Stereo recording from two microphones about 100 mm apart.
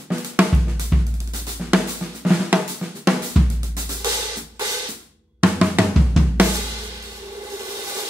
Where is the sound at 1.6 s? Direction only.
5° right (ahead or behind).